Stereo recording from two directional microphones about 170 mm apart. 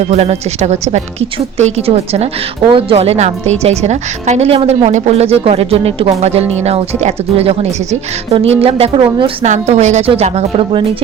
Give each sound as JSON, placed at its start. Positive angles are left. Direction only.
{"t": 0.1, "sound": "a woman's voice", "side_deg": -40}
{"t": 9.5, "sound": "a woman's voice", "side_deg": -40}